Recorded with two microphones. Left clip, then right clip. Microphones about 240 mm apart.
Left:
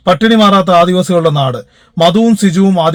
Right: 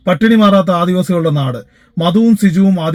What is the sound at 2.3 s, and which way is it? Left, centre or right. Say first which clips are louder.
Speech: left 4 dB; left.